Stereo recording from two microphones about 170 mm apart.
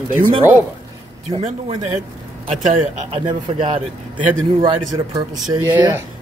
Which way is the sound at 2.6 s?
45° right (ahead or behind).